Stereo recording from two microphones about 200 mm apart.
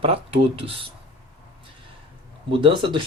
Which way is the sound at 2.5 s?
25° right (ahead or behind).